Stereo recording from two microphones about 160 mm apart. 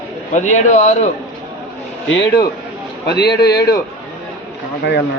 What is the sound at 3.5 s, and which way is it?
Speech, 25° left (ahead or behind).